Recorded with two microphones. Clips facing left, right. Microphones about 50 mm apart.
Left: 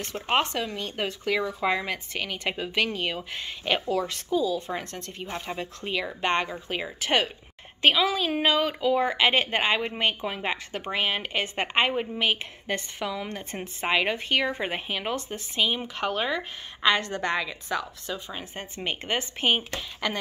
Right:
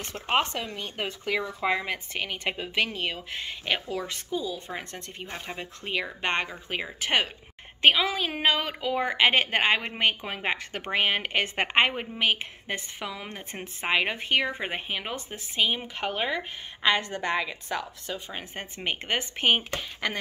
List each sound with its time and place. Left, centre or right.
0.7 s a woman's voice: right
2.5 s speech: centre
5.2 s speech: centre
5.6 s a woman's voice: right
12.2 s a woman's voice: right